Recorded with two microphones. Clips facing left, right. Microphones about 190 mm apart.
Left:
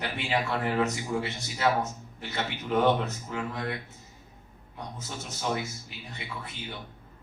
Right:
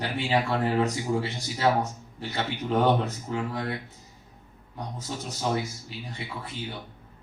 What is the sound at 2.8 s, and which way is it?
Speech, 35° right (ahead or behind).